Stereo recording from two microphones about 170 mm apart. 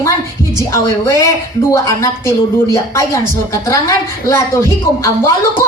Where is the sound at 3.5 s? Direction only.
20° left (ahead or behind).